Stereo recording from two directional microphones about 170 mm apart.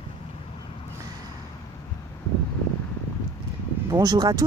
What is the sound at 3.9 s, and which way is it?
Speech, 25° right (ahead or behind).